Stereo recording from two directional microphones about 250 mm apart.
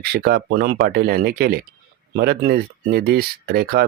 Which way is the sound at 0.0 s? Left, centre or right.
Right.